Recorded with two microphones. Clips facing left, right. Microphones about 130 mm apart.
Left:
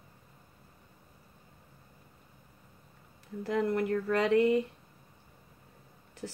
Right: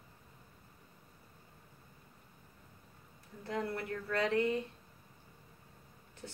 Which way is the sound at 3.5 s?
85° left.